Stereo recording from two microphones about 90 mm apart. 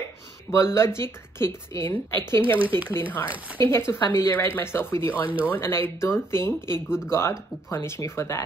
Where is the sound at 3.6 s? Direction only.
30° left (ahead or behind).